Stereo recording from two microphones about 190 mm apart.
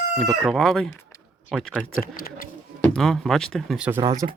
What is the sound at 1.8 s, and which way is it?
Speech, 50° left (ahead or behind).